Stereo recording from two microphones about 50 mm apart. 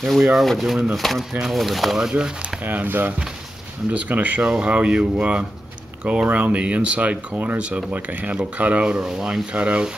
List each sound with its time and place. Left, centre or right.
0.0 s speech: centre
2.6 s speech: right
6.2 s speech: right
9.0 s speech: centre
9.6 s speech: right